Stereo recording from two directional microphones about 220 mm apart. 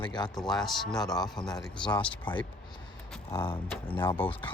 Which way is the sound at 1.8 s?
20° left (ahead or behind).